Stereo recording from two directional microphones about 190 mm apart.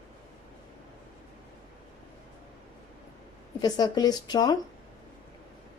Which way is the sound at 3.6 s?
20° left (ahead or behind).